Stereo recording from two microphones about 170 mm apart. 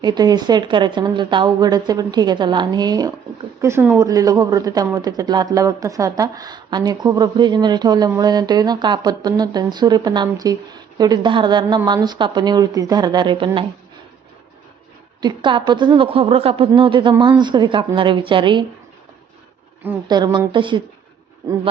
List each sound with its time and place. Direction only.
0.0 s speech: 25° right (ahead or behind)
15.2 s speech: 30° right (ahead or behind)
20.1 s speech: 25° right (ahead or behind)